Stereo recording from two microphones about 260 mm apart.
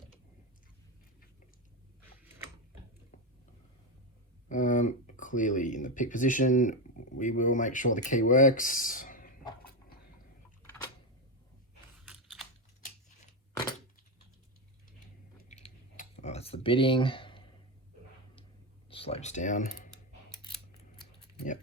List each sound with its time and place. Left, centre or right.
4.4 s speech: left
12.0 s chewing: centre
15.4 s a sound: left
18.9 s speech: left